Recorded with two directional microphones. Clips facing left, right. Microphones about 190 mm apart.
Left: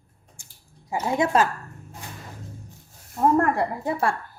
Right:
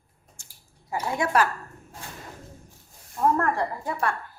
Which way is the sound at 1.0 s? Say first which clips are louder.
Left 3 dB; 20° left (ahead or behind).